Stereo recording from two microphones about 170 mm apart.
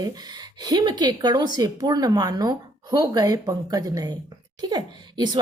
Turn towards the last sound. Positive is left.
turn(degrees=-25)  # may be behind; listen again after turning